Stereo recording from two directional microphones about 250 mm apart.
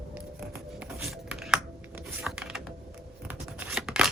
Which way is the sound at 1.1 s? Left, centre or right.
Centre.